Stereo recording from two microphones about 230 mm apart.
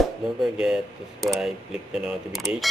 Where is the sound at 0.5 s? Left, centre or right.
Centre.